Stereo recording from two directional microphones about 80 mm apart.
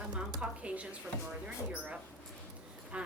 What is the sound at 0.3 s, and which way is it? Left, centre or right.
A woman's voice, centre.